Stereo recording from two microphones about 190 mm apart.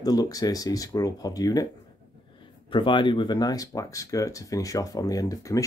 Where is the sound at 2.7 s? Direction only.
25° left (ahead or behind).